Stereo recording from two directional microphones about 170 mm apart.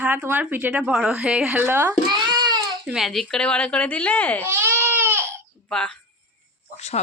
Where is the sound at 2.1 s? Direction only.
25° right (ahead or behind).